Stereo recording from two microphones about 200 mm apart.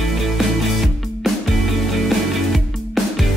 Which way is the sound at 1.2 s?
Centre (ahead or behind).